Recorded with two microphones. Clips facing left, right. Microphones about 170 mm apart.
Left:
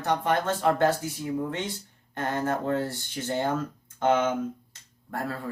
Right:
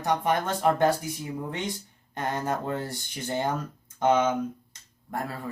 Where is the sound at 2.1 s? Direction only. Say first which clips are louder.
Left 1 dB; 15° right (ahead or behind).